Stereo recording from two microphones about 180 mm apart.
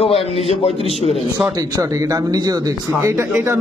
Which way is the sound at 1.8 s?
20° right (ahead or behind).